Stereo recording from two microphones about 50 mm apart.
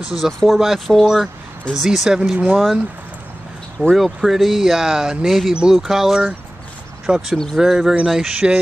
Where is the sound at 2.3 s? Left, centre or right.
Right.